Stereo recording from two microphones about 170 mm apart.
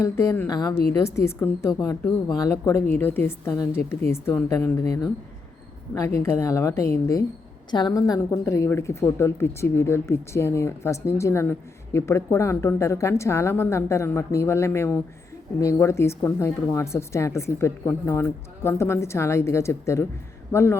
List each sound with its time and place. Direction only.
0.0 s a woman's voice: 15° left (ahead or behind)